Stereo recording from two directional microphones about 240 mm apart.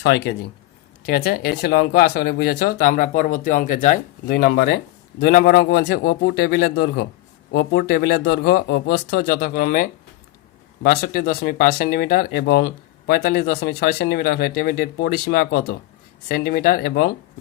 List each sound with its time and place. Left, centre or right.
0.0 s speech: left